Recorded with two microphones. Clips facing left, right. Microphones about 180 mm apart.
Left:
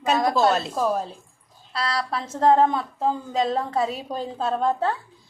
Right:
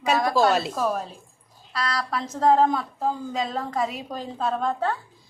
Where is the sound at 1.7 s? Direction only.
30° left (ahead or behind).